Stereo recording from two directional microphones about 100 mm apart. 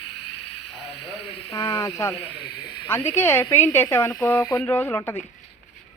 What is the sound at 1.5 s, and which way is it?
Speech, 30° left (ahead or behind).